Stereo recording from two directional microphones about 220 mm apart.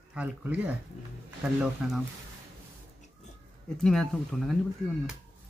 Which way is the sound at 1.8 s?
5° right (ahead or behind).